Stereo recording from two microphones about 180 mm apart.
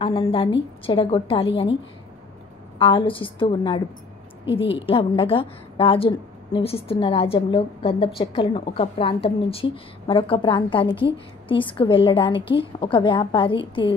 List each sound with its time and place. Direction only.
0.0 s a woman's voice: 30° left (ahead or behind)
2.8 s a woman's voice: 30° left (ahead or behind)